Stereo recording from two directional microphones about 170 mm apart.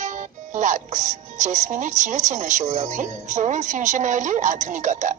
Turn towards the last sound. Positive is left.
turn(degrees=-45)  # may be behind; listen again after turning